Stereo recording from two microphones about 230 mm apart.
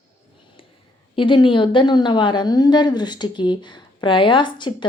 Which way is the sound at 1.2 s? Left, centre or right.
Left.